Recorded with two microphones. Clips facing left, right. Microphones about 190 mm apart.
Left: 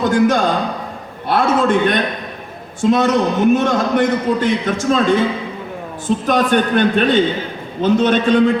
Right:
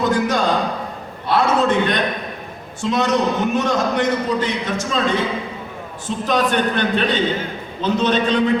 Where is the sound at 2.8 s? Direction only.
50° left (ahead or behind).